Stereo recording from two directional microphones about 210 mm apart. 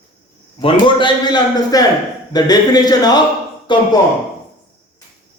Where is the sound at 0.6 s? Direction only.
25° left (ahead or behind).